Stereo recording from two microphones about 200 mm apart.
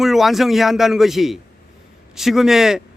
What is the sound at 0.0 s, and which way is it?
A man's voice, centre (ahead or behind).